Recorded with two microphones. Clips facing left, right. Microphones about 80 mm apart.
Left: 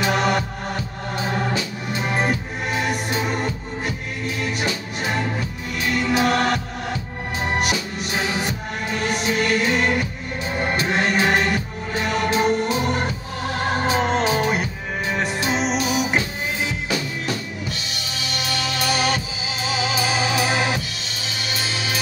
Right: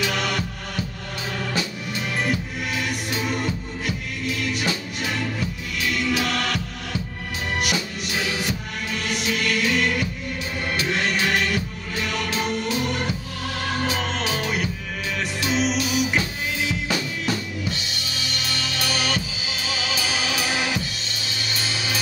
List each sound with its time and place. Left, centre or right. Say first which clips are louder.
0.0 s music: left 5 dB; left
19.7 s music: left 5 dB; left